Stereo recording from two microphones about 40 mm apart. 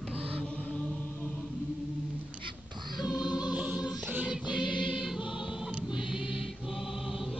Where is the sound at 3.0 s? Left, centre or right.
Centre.